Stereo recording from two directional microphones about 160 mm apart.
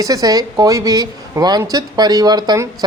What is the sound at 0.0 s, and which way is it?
Speech, 20° right (ahead or behind).